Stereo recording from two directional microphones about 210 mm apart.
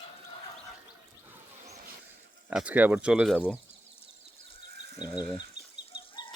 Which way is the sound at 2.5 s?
5° right (ahead or behind).